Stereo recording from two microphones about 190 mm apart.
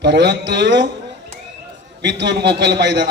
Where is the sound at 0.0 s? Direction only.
65° right (ahead or behind).